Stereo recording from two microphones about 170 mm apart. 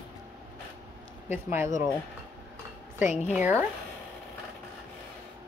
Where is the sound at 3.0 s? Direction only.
45° left (ahead or behind).